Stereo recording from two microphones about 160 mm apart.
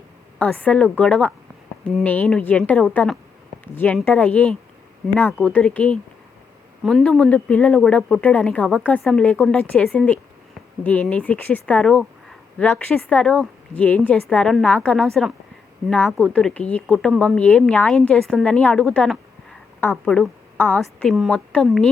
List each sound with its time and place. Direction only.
0.3 s a woman's voice: 10° left (ahead or behind)